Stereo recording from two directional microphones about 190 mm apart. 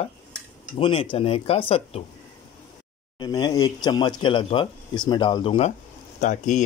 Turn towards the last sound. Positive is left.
turn(degrees=40)  # may be behind; listen again after turning